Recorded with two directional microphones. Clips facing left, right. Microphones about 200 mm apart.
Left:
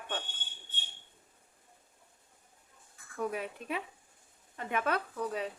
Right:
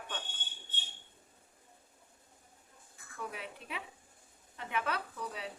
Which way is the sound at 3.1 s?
45° left (ahead or behind).